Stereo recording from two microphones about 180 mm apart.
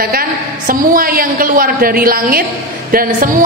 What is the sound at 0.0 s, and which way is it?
A woman's voice, 55° right (ahead or behind).